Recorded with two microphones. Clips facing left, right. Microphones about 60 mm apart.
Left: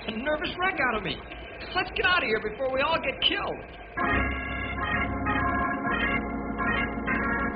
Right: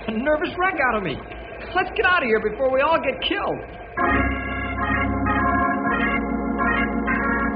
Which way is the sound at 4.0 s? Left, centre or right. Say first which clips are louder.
Right 6 dB; right.